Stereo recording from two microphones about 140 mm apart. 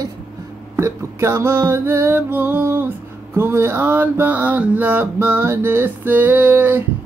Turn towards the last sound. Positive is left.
turn(degrees=-15)  # may be behind; listen again after turning